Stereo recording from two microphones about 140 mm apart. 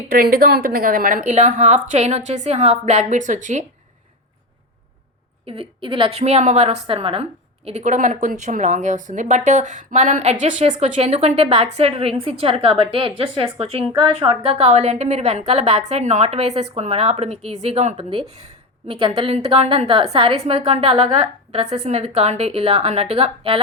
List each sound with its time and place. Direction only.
0.1 s a woman's voice: 90° right
1.3 s a woman's voice: 55° right (ahead or behind)
5.5 s a woman's voice: 40° right (ahead or behind)
18.9 s a woman's voice: 40° right (ahead or behind)
21.5 s a woman's voice: 55° right (ahead or behind)